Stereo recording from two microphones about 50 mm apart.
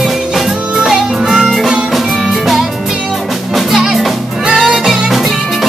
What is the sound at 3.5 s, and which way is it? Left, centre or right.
Music, centre.